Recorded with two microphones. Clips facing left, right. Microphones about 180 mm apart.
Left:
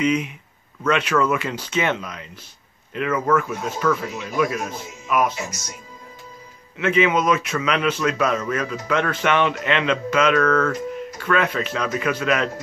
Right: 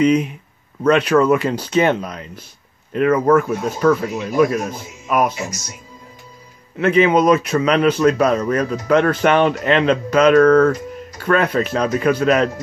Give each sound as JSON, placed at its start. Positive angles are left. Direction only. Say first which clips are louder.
{"t": 0.0, "sound": "speech", "louder": "right 6 dB", "side_deg": -35}
{"t": 6.8, "sound": "speech", "louder": "right 5 dB", "side_deg": -35}